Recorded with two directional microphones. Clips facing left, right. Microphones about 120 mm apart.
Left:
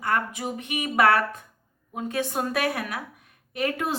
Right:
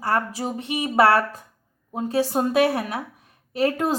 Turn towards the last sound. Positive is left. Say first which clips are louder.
# right 5 dB
turn(degrees=-35)  # may be behind; listen again after turning